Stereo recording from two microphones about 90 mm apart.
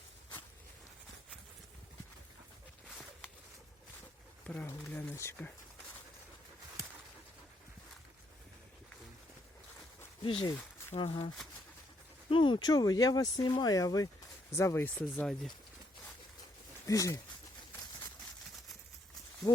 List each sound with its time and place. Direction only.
4.6 s speech: 30° left (ahead or behind)
10.2 s speech: 75° left (ahead or behind)
10.9 s speech: 65° left (ahead or behind)
12.3 s speech: 65° left (ahead or behind); by 14.1 s 45° left (ahead or behind)
14.5 s speech: 30° left (ahead or behind)
14.8 s speech: 20° left (ahead or behind)
16.8 s speech: 40° left (ahead or behind)
19.4 s speech: 45° left (ahead or behind)